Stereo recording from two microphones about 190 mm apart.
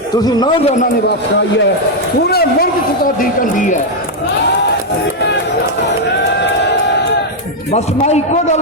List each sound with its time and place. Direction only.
0.1 s a man's voice: 20° left (ahead or behind)
2.3 s speech: 55° left (ahead or behind)
7.7 s a man's voice: 35° left (ahead or behind)